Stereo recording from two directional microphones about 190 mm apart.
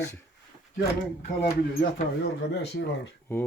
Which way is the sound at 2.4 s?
65° left (ahead or behind).